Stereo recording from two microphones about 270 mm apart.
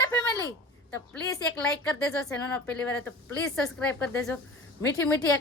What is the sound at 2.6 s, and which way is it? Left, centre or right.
A woman's voice, centre.